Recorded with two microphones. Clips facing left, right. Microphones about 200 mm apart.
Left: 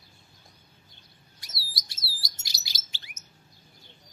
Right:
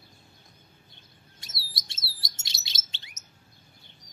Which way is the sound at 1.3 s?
25° right (ahead or behind).